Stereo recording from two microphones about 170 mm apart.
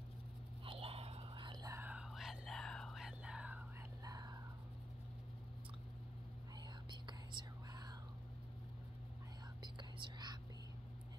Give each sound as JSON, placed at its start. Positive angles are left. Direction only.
{"t": 0.7, "sound": "whispering", "side_deg": -35}
{"t": 1.8, "sound": "whispering", "side_deg": -5}
{"t": 4.0, "sound": "whispering", "side_deg": -20}
{"t": 6.9, "sound": "whispering", "side_deg": -25}
{"t": 9.6, "sound": "whispering", "side_deg": -25}